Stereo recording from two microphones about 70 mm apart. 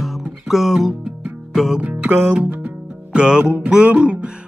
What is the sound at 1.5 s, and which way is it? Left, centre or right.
Speech, centre.